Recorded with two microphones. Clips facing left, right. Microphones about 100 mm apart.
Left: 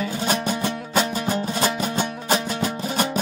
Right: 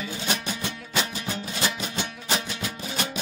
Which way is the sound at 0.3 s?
45° left (ahead or behind).